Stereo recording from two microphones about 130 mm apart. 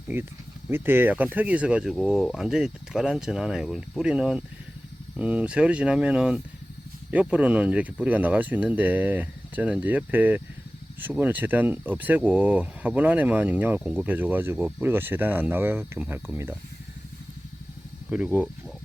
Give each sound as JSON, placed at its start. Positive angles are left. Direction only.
{"t": 0.1, "sound": "speech", "side_deg": -20}
{"t": 18.1, "sound": "speech", "side_deg": -10}